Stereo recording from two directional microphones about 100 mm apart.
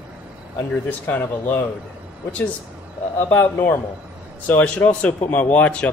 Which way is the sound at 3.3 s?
20° left (ahead or behind).